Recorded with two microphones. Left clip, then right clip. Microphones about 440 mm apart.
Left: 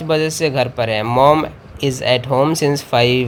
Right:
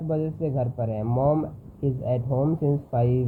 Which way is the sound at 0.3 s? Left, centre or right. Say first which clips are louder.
Left 11 dB; left.